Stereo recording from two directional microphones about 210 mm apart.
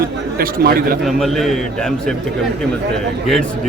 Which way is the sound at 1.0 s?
Centre (ahead or behind).